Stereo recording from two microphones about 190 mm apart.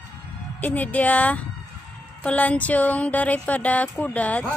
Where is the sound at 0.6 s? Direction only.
10° left (ahead or behind).